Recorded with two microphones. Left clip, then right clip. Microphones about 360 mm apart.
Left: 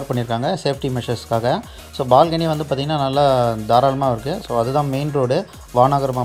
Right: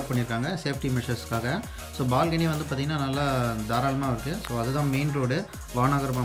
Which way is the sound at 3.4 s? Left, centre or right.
Left.